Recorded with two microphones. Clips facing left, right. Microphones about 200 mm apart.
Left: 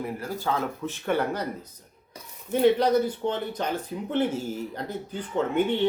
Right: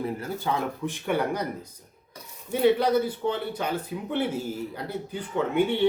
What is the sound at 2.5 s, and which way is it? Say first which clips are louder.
Speech: left 1 dB; 10° right (ahead or behind).